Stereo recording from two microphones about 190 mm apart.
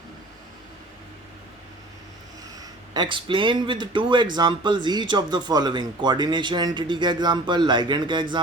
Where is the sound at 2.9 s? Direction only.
25° right (ahead or behind).